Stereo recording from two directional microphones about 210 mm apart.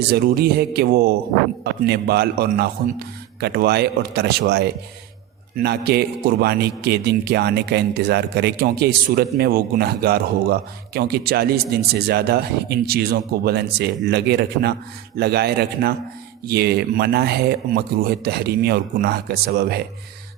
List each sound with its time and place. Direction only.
0.1 s a man's voice: 50° right (ahead or behind)